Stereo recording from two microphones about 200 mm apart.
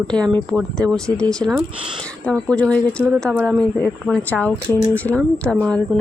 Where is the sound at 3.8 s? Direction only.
5° left (ahead or behind).